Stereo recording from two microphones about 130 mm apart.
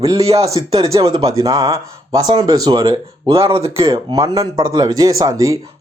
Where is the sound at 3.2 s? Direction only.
45° right (ahead or behind).